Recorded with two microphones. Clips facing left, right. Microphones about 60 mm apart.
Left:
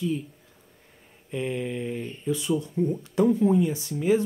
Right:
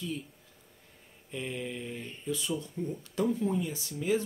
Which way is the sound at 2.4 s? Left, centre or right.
Centre.